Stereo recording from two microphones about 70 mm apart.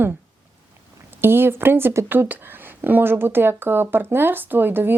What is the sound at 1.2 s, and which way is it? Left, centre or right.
Speech, right.